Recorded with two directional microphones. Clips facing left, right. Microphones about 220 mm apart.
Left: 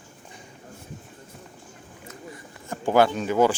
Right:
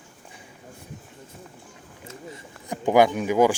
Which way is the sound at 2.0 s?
20° right (ahead or behind).